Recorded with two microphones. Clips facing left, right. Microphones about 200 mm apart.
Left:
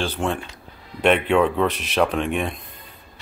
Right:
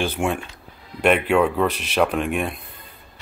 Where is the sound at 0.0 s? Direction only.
10° right (ahead or behind).